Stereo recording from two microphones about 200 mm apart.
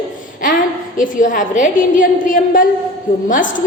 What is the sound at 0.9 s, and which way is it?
A woman's voice, 40° left (ahead or behind).